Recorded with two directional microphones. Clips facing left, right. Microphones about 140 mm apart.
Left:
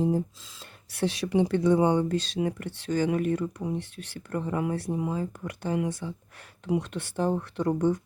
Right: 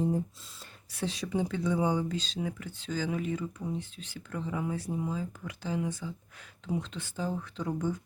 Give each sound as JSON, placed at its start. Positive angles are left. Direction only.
{"t": 0.9, "sound": "speech", "side_deg": 70}